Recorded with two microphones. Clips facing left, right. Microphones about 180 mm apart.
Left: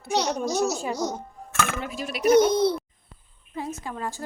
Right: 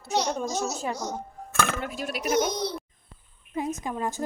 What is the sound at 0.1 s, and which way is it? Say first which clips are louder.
Speech: left 2 dB; 70° left (ahead or behind).